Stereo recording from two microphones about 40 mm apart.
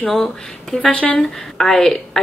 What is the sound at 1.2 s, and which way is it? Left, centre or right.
Speech, centre.